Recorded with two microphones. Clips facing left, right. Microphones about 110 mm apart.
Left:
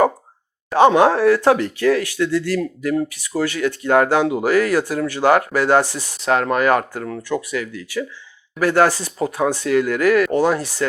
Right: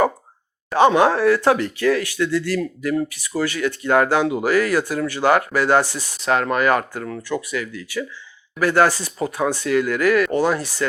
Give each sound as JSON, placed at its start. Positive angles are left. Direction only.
{"t": 0.7, "sound": "speech", "side_deg": 45}
{"t": 7.2, "sound": "speech", "side_deg": 25}
{"t": 7.5, "sound": "speech", "side_deg": 45}